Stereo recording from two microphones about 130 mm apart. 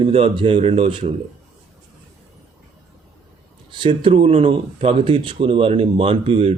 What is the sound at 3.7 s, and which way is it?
Speech, 40° right (ahead or behind).